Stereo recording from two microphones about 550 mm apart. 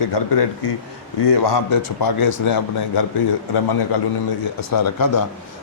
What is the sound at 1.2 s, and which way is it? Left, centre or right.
A man's voice, left.